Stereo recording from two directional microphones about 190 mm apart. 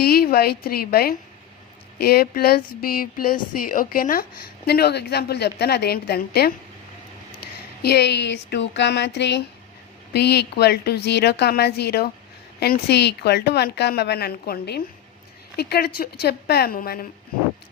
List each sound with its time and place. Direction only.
0.0 s a woman's voice: 55° left (ahead or behind)
7.8 s a woman's voice: 60° left (ahead or behind)